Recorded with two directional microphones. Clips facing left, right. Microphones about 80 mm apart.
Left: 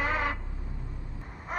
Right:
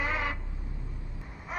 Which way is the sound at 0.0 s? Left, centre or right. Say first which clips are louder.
Left 2 dB; left.